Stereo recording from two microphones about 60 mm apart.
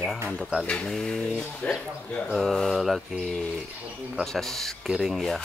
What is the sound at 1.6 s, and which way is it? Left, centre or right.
Speech, left.